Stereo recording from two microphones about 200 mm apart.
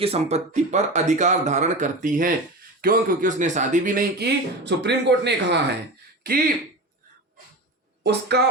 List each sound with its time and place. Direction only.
0.0 s speech: 30° right (ahead or behind); by 5.5 s 60° right (ahead or behind)
8.0 s speech: 55° right (ahead or behind)